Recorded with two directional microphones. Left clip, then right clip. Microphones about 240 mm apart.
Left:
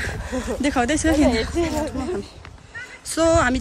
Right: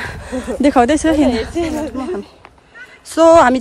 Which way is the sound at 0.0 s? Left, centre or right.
Centre.